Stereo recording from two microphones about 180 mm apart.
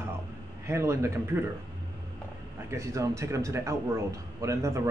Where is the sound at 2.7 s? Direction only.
15° right (ahead or behind).